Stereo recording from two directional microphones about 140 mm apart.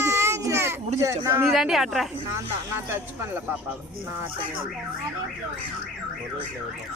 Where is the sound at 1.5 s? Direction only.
Centre (ahead or behind).